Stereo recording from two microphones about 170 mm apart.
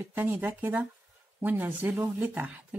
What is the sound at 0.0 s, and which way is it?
Speech, 10° right (ahead or behind).